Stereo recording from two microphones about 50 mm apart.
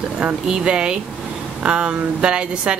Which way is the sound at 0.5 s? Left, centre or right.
Centre.